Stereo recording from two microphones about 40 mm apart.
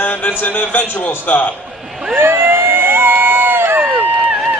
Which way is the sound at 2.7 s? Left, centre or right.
Right.